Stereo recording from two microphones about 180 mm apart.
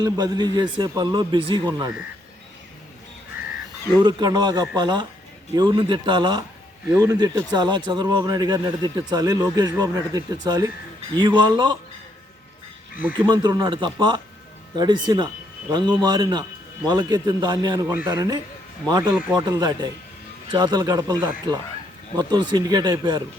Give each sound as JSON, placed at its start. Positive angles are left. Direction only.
{"t": 0.0, "sound": "speech", "side_deg": -25}
{"t": 4.0, "sound": "speech", "side_deg": -20}
{"t": 13.2, "sound": "speech", "side_deg": -20}